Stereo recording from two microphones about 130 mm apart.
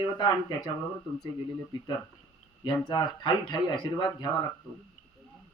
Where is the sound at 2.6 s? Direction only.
35° left (ahead or behind).